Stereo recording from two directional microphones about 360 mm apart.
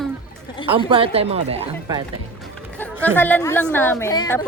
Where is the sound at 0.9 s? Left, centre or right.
Centre.